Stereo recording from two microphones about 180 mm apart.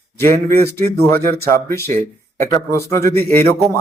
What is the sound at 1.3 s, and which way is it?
Speech, 60° right (ahead or behind).